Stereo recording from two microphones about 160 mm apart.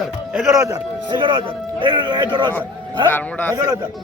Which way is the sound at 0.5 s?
20° right (ahead or behind).